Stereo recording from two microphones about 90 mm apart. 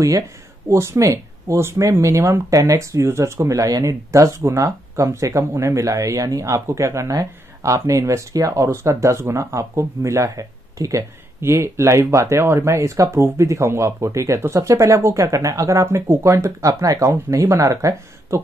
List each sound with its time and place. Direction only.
0.7 s speech: 35° right (ahead or behind)